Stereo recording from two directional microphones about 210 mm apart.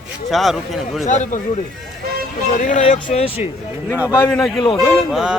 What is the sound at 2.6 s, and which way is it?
Speech, 35° left (ahead or behind).